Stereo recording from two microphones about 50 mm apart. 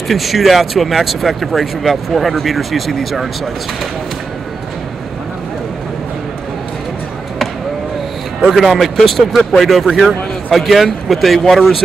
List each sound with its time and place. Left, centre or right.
0.1 s speech: centre
8.5 s speech: centre